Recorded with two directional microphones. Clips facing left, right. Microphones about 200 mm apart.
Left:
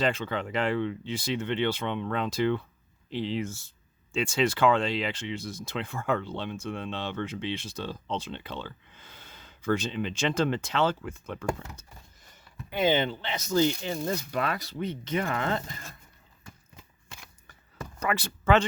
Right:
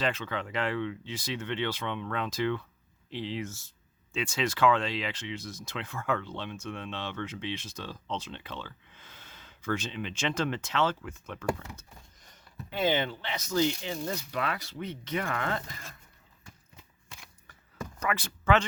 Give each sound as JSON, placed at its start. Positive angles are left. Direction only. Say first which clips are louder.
{"t": 0.0, "sound": "speech", "louder": "left 4 dB", "side_deg": 30}
{"t": 12.7, "sound": "speech", "louder": "left 3 dB", "side_deg": 20}
{"t": 13.9, "sound": "speech", "louder": "left 4 dB", "side_deg": 45}
{"t": 18.0, "sound": "speech", "louder": "left 3 dB", "side_deg": 30}